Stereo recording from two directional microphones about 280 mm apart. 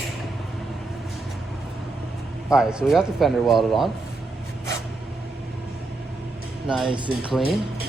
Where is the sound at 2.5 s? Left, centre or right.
Centre.